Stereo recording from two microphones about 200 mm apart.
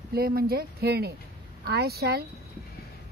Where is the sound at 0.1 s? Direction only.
50° right (ahead or behind).